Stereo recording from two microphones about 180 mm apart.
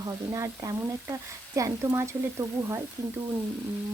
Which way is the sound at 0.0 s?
20° right (ahead or behind).